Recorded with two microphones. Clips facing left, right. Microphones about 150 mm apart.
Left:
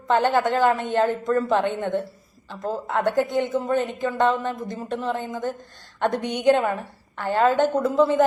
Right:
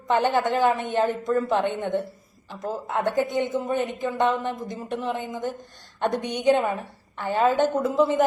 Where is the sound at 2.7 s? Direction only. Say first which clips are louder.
Left 2 dB; centre (ahead or behind).